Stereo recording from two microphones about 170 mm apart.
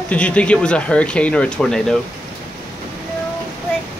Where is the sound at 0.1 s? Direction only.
5° left (ahead or behind).